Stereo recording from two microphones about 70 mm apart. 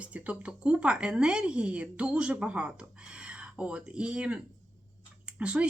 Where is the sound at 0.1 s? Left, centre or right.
Centre.